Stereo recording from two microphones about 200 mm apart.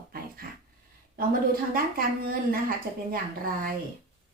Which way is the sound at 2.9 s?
15° right (ahead or behind).